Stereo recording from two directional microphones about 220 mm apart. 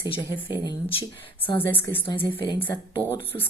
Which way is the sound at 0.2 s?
10° left (ahead or behind).